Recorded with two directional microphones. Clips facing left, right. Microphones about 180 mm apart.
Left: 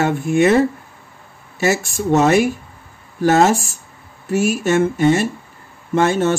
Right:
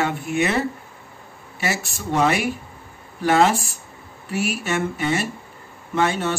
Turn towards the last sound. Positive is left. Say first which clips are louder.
# left 6 dB
turn(degrees=45)  # may be behind; listen again after turning